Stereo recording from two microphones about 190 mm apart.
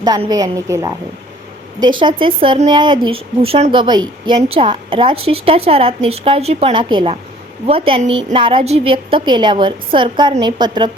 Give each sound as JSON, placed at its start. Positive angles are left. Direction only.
{"t": 0.0, "sound": "a woman's voice", "side_deg": -20}